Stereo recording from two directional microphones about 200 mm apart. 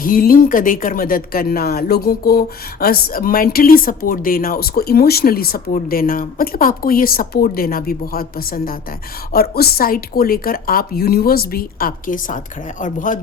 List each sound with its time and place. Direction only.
0.0 s speech: 45° left (ahead or behind)